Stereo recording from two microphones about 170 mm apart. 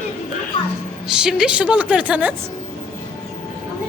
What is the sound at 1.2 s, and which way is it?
Speech, 5° right (ahead or behind).